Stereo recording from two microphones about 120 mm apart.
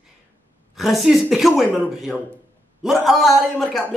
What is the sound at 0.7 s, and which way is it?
Speech, centre (ahead or behind).